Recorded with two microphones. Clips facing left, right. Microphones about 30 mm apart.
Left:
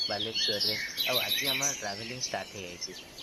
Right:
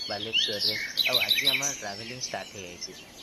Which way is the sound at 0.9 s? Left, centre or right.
Right.